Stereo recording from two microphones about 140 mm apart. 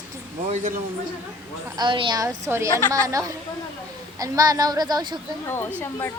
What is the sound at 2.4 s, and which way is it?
A woman's voice, 20° right (ahead or behind).